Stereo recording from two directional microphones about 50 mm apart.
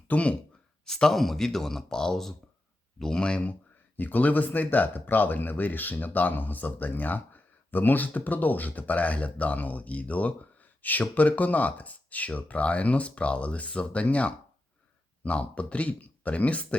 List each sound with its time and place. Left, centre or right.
0.1 s speech: left
0.9 s speech: centre
3.9 s speech: left